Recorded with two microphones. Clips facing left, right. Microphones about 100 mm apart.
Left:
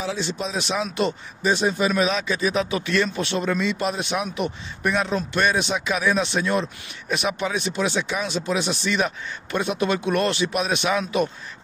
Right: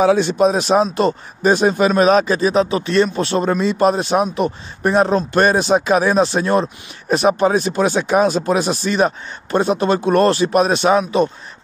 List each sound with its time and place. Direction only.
0.0 s speech: 55° right (ahead or behind); by 11.2 s 35° right (ahead or behind)